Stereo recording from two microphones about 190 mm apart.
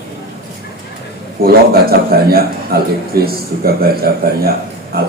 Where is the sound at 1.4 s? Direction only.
55° right (ahead or behind).